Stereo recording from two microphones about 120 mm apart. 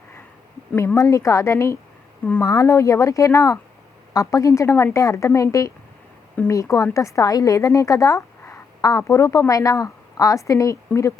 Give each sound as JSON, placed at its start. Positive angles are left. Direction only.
{"t": 0.9, "sound": "speech", "side_deg": 25}